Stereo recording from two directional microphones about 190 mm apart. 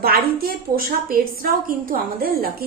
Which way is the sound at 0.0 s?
50° right (ahead or behind).